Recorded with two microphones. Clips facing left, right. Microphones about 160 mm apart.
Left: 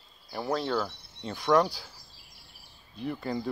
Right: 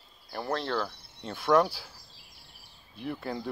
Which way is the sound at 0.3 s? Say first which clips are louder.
Left 2 dB; 5° left (ahead or behind).